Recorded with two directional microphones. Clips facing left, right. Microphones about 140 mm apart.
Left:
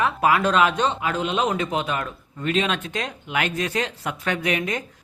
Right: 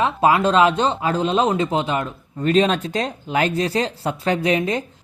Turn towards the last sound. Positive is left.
turn(degrees=-30)  # may be behind; listen again after turning